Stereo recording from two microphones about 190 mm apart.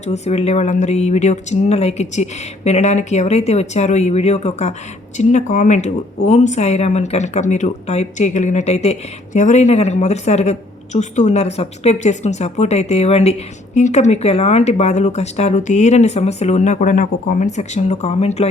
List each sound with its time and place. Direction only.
0.0 s speech: 35° left (ahead or behind)